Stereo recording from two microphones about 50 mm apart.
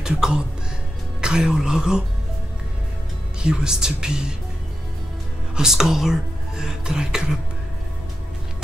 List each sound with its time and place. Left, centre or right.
0.0 s speech: centre
3.4 s speech: centre
5.6 s speech: centre